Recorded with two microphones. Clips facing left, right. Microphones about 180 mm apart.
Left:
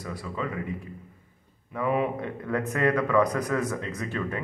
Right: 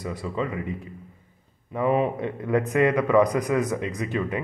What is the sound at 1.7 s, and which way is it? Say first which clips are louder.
A man's voice: right 4 dB; 25° right (ahead or behind).